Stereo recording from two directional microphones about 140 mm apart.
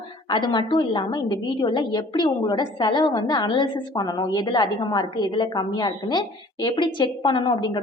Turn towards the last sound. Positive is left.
turn(degrees=35)  # may be behind; listen again after turning